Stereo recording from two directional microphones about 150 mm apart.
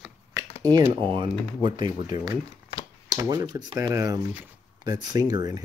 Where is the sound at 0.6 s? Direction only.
25° right (ahead or behind).